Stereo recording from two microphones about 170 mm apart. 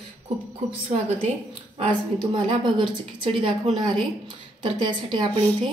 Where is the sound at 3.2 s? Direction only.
30° right (ahead or behind).